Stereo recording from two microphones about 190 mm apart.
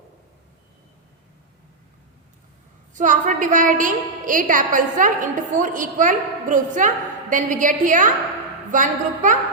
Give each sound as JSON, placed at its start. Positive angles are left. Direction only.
{"t": 2.9, "sound": "a woman's voice", "side_deg": -40}